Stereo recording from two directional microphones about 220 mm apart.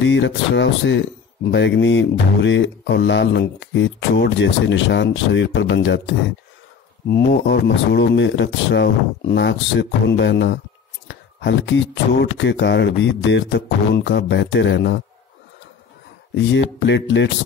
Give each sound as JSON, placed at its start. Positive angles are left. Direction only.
{"t": 0.0, "sound": "speech", "side_deg": 55}
{"t": 7.4, "sound": "speech", "side_deg": 50}
{"t": 16.8, "sound": "speech", "side_deg": 55}